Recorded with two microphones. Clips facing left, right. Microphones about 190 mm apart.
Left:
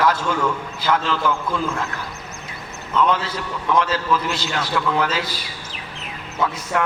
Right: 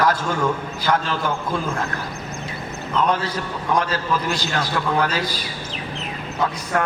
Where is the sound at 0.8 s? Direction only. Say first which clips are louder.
Left 1 dB; 45° right (ahead or behind).